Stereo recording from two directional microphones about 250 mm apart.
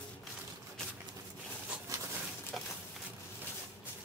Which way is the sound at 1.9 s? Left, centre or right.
Centre.